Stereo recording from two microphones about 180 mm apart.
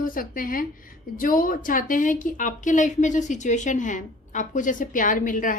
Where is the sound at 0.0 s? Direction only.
50° left (ahead or behind).